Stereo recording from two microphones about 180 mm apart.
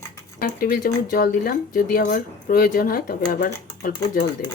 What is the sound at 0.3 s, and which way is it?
Speech, 55° left (ahead or behind).